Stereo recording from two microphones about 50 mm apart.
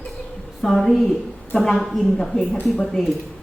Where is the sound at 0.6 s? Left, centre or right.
Centre.